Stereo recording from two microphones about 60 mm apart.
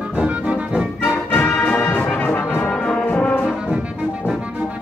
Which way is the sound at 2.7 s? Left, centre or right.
Centre.